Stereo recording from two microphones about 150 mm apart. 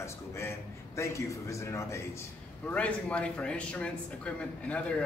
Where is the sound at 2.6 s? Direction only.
10° left (ahead or behind).